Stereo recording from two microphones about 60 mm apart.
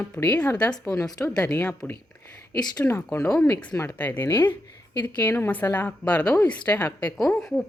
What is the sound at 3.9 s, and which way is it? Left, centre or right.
A woman's voice, left.